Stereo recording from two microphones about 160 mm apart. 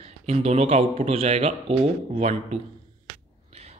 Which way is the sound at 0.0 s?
45° right (ahead or behind).